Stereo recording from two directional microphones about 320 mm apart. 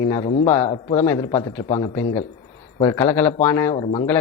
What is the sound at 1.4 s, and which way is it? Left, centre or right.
A man's voice, centre.